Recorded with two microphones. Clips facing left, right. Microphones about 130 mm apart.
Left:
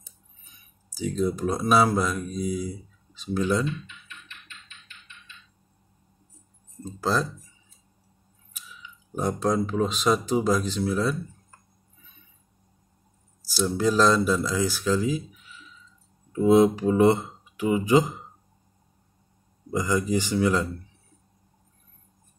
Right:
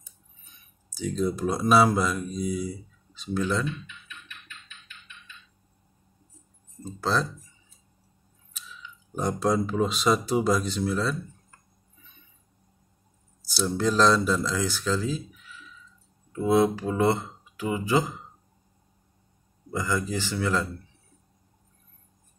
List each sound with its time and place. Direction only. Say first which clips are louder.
0.8 s speech: left 1 dB; 10° left (ahead or behind)
3.3 s speech: left 3 dB; 15° left (ahead or behind)
6.8 s speech: left 1 dB; 5° left (ahead or behind)
8.5 s speech: right 1 dB; 10° left (ahead or behind)
13.5 s speech: left 2 dB; 5° left (ahead or behind)
19.7 s speech: left 4 dB; 15° left (ahead or behind)